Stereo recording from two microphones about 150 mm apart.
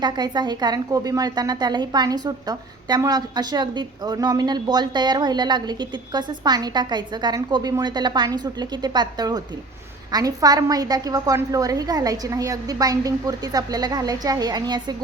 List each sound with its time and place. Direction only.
0.0 s a woman's voice: 30° right (ahead or behind)